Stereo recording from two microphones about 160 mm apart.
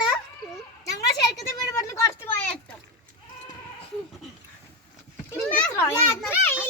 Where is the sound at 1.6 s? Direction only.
20° left (ahead or behind).